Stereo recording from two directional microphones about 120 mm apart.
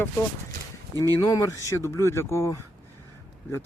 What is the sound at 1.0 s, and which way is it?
Speech, 30° left (ahead or behind).